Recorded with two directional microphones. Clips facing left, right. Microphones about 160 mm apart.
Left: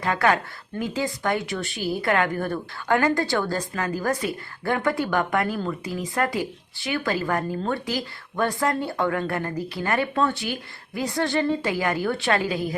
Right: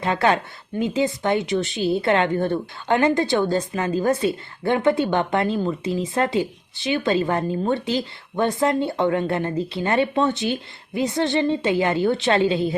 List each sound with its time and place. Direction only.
0.0 s speech: 25° right (ahead or behind)